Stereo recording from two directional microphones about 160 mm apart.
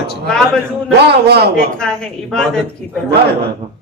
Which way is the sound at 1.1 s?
90° right.